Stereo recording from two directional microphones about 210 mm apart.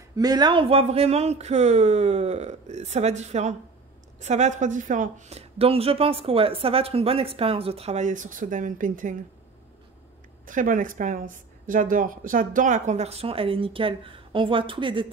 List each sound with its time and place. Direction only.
0.1 s speech: 20° right (ahead or behind); by 9.1 s 40° right (ahead or behind)
10.4 s speech: 40° right (ahead or behind); by 15.0 s 25° right (ahead or behind)